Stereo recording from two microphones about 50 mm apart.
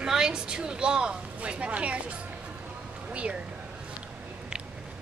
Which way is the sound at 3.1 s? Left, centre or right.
Right.